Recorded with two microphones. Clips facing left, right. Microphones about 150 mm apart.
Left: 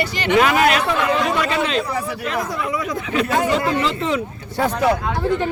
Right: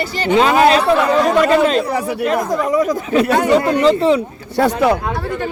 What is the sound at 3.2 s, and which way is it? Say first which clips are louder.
Speech: right 1 dB; 75° right (ahead or behind).